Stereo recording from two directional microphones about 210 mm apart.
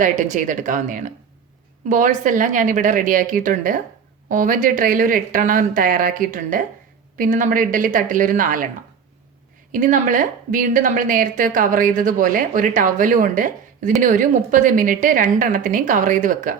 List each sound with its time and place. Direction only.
0.0 s a woman's voice: 35° right (ahead or behind)
9.7 s a woman's voice: 40° right (ahead or behind)